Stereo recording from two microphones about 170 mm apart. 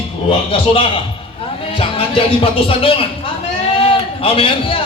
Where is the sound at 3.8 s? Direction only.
30° left (ahead or behind).